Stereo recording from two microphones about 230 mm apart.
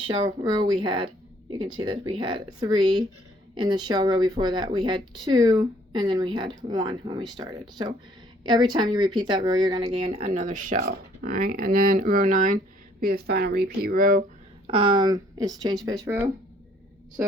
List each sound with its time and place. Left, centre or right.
0.4 s speech: centre; by 14.3 s right
14.7 s speech: right